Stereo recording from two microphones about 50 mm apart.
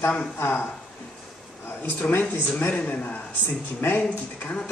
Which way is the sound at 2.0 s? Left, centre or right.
Left.